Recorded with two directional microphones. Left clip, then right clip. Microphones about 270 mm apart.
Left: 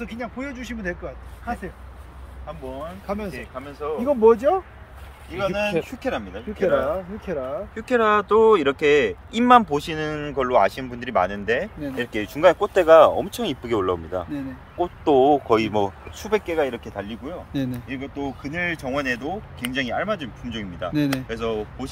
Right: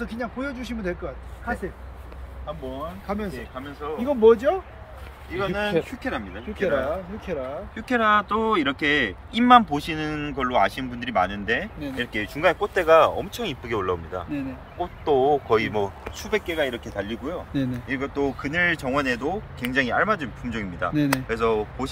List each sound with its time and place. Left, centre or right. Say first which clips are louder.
0.0 s speech: right 1 dB; centre
3.1 s speech: left 1 dB; left
3.8 s speech: left 1 dB; left
16.2 s speech: left 3 dB; centre